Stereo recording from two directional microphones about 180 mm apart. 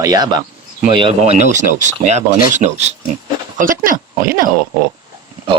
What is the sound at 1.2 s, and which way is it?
Speech, 40° right (ahead or behind).